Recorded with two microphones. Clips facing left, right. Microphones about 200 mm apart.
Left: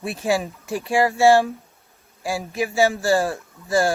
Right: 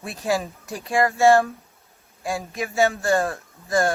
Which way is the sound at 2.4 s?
20° left (ahead or behind).